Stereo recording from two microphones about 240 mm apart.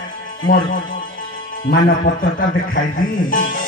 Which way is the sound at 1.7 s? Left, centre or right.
Left.